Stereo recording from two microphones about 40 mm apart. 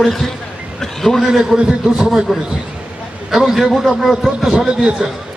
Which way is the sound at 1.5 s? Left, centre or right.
Right.